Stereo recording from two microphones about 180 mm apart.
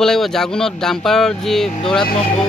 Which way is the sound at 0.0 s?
Centre (ahead or behind).